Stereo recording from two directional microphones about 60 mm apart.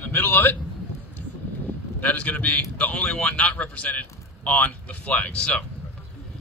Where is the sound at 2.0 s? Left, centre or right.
Left.